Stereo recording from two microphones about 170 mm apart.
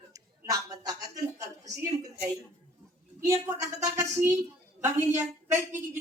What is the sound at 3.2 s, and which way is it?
A woman's voice, 15° right (ahead or behind).